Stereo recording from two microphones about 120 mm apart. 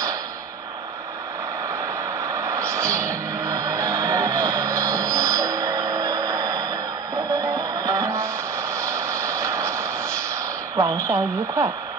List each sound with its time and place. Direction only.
2.3 s music: 25° right (ahead or behind)
8.8 s vehicle: 25° right (ahead or behind)
11.1 s speech: 25° right (ahead or behind)